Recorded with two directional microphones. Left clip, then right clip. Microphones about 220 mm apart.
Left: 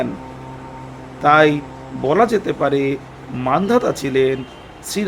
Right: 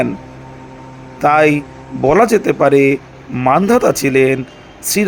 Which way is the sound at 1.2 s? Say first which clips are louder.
Right 2 dB; 25° right (ahead or behind).